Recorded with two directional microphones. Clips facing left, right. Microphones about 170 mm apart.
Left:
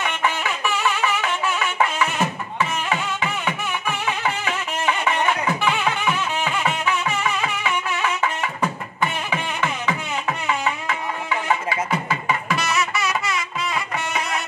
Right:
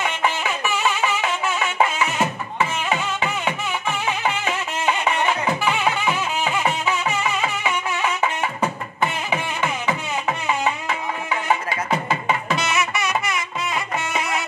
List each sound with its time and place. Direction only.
12.4 s music: 20° right (ahead or behind)